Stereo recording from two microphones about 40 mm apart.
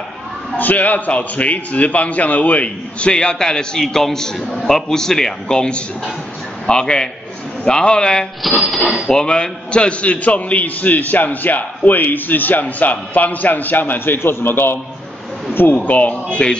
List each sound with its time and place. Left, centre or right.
0.6 s a man's voice: left; by 5.6 s centre
5.6 s a man's voice: left
15.7 s a man's voice: left
16.4 s a man's voice: left